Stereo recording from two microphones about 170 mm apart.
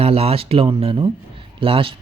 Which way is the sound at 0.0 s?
35° right (ahead or behind).